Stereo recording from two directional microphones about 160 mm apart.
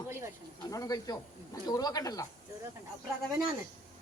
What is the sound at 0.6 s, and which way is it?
Speech, 20° left (ahead or behind).